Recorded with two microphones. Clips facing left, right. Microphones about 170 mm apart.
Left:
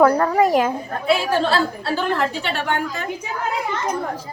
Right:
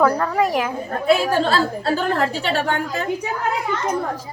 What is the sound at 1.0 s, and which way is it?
A woman's voice, 40° right (ahead or behind).